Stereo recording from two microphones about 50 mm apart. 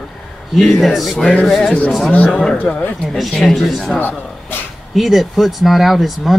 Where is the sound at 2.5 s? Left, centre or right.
Left.